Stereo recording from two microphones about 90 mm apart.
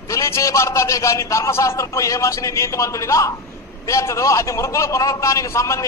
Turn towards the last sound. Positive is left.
turn(degrees=35)  # may be behind; listen again after turning